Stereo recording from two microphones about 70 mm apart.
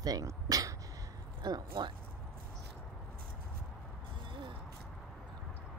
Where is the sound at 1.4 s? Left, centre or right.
Right.